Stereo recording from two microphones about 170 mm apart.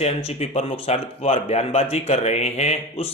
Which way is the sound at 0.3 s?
40° left (ahead or behind).